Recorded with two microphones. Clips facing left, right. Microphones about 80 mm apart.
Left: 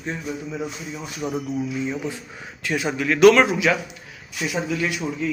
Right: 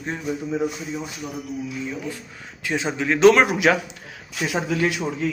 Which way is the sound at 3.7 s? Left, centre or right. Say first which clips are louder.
Right 2 dB; right.